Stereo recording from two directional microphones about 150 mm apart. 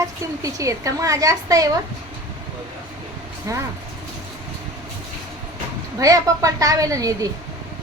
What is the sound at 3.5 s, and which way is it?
Speech, 20° right (ahead or behind).